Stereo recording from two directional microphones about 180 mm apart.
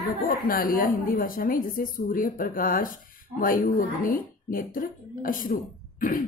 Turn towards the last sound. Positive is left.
turn(degrees=50)  # may be behind; listen again after turning